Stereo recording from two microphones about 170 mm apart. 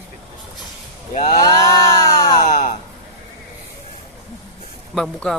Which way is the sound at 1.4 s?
20° left (ahead or behind).